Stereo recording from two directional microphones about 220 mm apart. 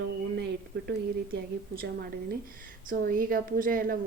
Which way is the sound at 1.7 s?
45° right (ahead or behind).